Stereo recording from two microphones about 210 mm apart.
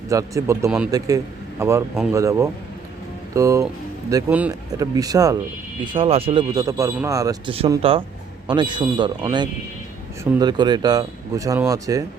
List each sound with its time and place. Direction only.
0.1 s a man's voice: 15° right (ahead or behind)